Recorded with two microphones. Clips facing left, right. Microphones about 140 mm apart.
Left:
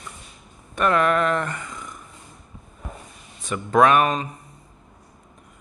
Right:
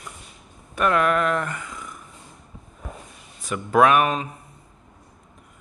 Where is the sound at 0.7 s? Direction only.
5° right (ahead or behind).